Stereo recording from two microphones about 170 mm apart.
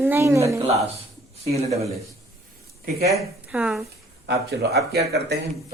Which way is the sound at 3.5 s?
5° right (ahead or behind).